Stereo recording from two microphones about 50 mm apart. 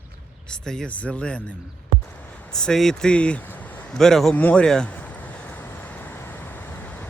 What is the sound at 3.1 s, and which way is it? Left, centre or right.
Speech, left.